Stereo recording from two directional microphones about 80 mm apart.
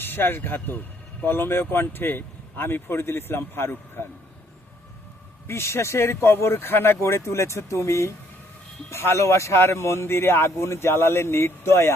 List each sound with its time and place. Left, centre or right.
0.0 s speech: left
5.5 s a man's voice: left